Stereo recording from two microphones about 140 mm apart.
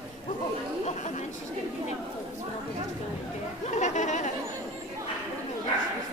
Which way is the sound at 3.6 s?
60° left (ahead or behind).